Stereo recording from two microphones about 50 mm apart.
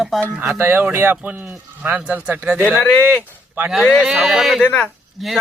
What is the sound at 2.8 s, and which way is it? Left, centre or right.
Speech, left.